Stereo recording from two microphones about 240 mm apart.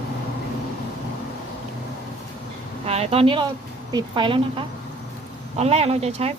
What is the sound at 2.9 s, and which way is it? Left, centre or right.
Speech, right.